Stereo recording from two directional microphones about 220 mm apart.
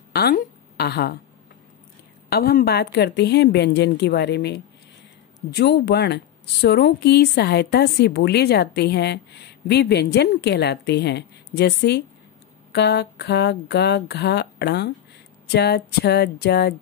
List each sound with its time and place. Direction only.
0.1 s a woman's voice: 45° left (ahead or behind)
2.2 s speech: 45° left (ahead or behind)